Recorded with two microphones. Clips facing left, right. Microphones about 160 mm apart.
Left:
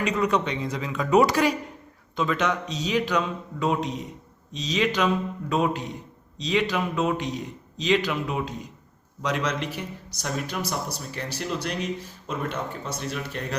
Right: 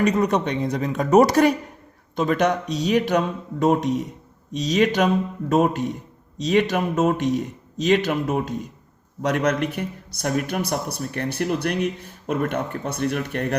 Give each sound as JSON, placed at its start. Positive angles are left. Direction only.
{"t": 0.1, "sound": "a man's voice", "side_deg": -40}